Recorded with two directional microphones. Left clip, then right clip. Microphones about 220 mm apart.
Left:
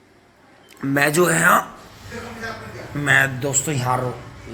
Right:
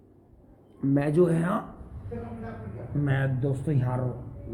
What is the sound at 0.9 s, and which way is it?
Speech, centre (ahead or behind).